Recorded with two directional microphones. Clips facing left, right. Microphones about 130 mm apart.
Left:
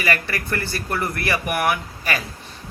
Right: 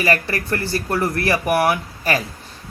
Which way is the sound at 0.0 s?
35° right (ahead or behind).